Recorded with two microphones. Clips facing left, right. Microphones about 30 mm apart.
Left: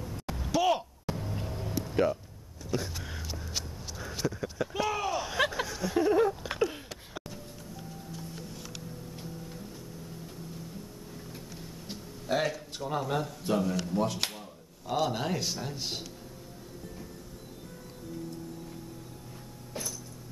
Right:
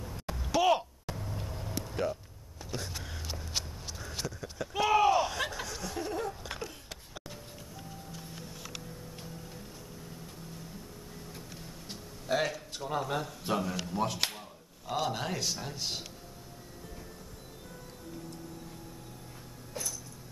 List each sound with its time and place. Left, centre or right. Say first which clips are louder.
0.0 s a sound: left 2 dB; centre
1.0 s a sound: left 5 dB; centre
1.4 s vehicle: left 4 dB; centre
2.7 s speech: left 5 dB; centre
4.2 s speech: left 10 dB; centre
4.7 s speech: right 7 dB; centre
5.3 s a sound: left 6 dB; centre
9.1 s music: left 3 dB; centre
11.9 s music: left 1 dB; centre
13.4 s speech: left 3 dB; centre